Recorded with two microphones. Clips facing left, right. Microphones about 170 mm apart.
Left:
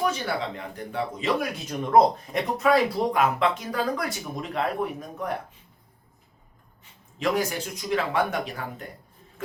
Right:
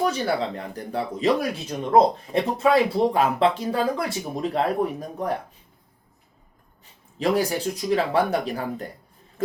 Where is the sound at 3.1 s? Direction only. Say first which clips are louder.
Right 3 dB; 30° right (ahead or behind).